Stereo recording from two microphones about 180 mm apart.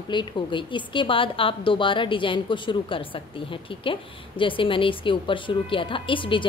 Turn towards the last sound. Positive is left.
turn(degrees=30)  # may be behind; listen again after turning